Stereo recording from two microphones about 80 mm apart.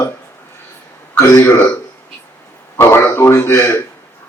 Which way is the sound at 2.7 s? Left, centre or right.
Left.